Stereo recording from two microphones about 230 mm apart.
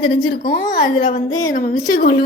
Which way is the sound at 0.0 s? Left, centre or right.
Left.